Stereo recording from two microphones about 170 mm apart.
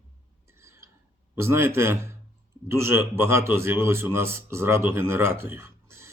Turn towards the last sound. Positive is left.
turn(degrees=-15)  # may be behind; listen again after turning